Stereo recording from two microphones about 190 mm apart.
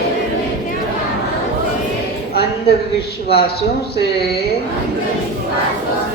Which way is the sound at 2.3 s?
60° left (ahead or behind).